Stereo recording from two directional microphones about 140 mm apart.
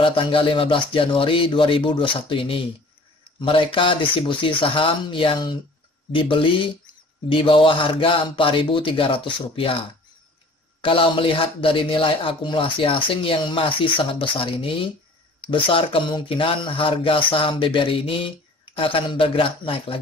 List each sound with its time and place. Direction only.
0.0 s speech: 40° left (ahead or behind)
10.8 s speech: 40° left (ahead or behind)